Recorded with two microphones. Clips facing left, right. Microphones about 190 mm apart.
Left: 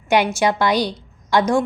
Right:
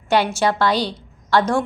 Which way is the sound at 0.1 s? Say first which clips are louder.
Left 1 dB; 10° left (ahead or behind).